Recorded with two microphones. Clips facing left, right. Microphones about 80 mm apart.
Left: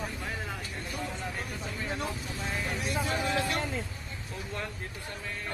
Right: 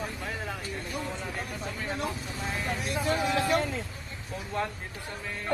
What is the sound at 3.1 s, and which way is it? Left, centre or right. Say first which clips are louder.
Speech: right 6 dB; centre.